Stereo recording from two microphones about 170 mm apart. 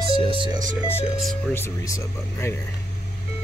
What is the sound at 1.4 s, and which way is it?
Speech, 15° left (ahead or behind).